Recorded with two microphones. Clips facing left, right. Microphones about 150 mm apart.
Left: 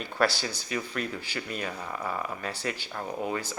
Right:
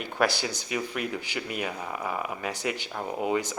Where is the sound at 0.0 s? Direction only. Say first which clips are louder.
Right 1 dB; 15° right (ahead or behind).